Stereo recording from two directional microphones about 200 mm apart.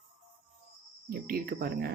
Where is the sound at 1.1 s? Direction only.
45° right (ahead or behind).